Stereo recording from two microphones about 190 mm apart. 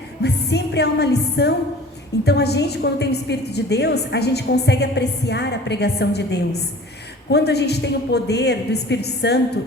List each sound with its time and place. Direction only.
0.2 s music: 60° left (ahead or behind)
2.2 s a woman's voice: 60° left (ahead or behind)